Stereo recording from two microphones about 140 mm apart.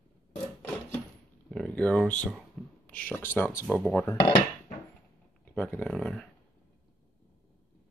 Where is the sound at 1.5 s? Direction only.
5° left (ahead or behind).